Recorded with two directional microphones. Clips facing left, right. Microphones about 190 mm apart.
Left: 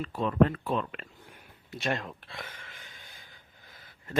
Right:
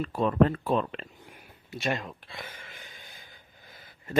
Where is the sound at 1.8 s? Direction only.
Centre (ahead or behind).